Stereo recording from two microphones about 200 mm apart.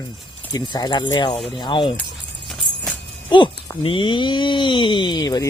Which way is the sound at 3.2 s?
25° left (ahead or behind).